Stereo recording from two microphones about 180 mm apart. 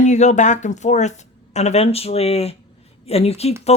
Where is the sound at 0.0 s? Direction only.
40° left (ahead or behind).